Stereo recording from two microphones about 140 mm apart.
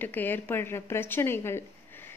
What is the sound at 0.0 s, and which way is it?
A woman's voice, 15° left (ahead or behind).